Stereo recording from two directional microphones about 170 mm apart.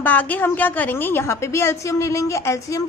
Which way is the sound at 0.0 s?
10° left (ahead or behind).